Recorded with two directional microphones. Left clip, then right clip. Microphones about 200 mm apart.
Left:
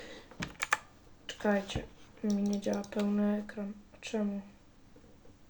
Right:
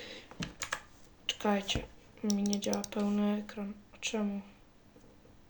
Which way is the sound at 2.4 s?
60° right (ahead or behind).